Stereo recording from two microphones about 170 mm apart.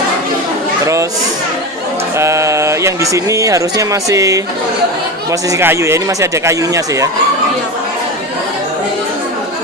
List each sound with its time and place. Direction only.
2.1 s speech: 15° right (ahead or behind)